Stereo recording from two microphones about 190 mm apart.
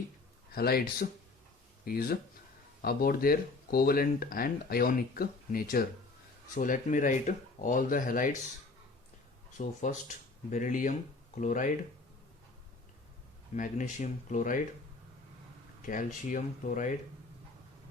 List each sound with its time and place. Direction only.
0.5 s speech: 55° left (ahead or behind)
9.6 s speech: 40° left (ahead or behind)
13.6 s speech: 40° left (ahead or behind)
15.9 s speech: 40° left (ahead or behind)